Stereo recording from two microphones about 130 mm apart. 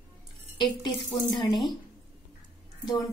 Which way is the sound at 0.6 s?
35° left (ahead or behind).